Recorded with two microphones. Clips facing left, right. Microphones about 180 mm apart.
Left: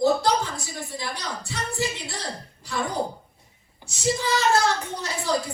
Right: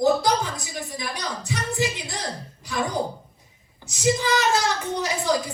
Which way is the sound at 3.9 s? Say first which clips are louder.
Right 3 dB; 15° right (ahead or behind).